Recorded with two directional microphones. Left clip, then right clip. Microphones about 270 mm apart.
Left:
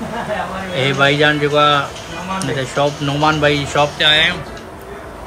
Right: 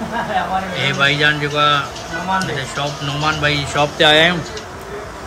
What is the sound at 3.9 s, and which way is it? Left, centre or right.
Speech, centre.